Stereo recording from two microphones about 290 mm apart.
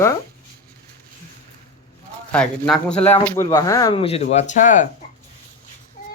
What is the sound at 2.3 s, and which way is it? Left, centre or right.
Speech, centre.